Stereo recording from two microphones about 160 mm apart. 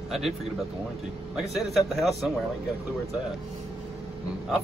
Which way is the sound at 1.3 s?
Centre (ahead or behind).